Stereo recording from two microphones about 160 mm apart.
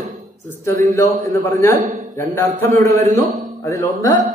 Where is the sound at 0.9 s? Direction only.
20° left (ahead or behind).